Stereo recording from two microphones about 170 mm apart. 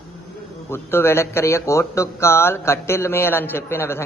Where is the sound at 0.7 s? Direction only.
15° left (ahead or behind).